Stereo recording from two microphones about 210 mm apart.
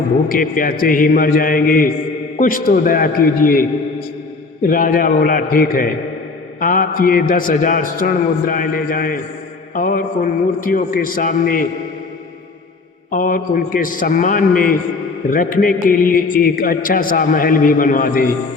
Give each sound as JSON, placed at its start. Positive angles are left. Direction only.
{"t": 0.3, "sound": "a man's voice", "side_deg": 40}
{"t": 4.7, "sound": "a man's voice", "side_deg": 40}
{"t": 13.1, "sound": "a man's voice", "side_deg": 40}